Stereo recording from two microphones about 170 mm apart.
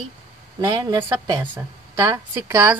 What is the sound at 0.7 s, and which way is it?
A woman's voice, 25° right (ahead or behind).